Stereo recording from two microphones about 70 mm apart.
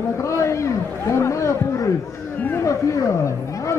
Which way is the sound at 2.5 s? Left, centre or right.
Left.